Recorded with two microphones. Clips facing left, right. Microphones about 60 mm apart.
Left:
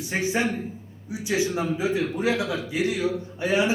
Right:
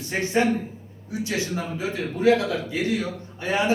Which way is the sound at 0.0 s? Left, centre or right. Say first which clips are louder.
Right 2 dB; centre.